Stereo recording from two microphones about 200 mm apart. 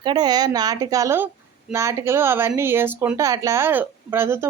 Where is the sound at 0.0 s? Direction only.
20° right (ahead or behind).